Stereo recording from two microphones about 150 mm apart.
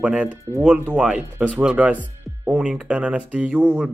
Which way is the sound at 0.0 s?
5° right (ahead or behind).